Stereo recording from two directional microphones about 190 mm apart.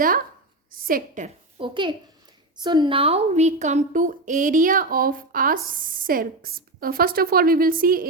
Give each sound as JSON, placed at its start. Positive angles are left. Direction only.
{"t": 0.7, "sound": "a woman's voice", "side_deg": -50}
{"t": 1.5, "sound": "a child's voice", "side_deg": -25}